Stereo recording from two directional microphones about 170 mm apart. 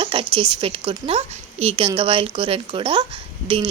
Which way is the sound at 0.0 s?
30° right (ahead or behind).